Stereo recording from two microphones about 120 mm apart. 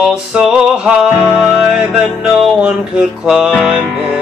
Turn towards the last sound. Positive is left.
turn(degrees=-10)  # may be behind; listen again after turning